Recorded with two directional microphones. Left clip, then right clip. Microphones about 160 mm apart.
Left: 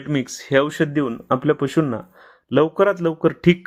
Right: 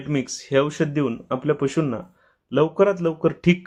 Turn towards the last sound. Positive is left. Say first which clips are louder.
# left 3 dB
turn(degrees=25)  # may be behind; listen again after turning